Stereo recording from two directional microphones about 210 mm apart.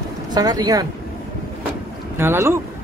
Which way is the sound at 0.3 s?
20° right (ahead or behind).